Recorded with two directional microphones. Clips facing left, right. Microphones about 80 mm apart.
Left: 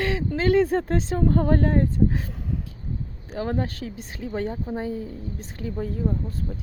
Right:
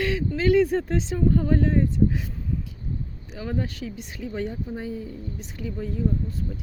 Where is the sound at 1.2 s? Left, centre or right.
Left.